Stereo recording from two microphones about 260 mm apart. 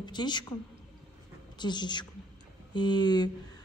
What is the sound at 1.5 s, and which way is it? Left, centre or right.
A woman's voice, centre.